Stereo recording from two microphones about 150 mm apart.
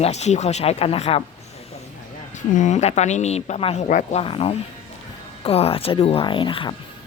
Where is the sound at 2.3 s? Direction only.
55° left (ahead or behind).